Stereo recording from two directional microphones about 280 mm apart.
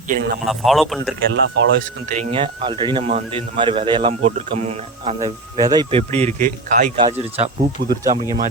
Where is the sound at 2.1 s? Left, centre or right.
Right.